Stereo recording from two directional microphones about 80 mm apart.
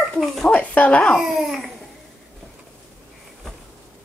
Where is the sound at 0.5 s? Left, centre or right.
Centre.